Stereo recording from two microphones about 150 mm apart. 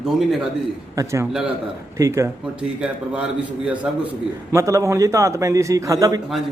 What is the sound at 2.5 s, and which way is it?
A man's voice, 5° right (ahead or behind).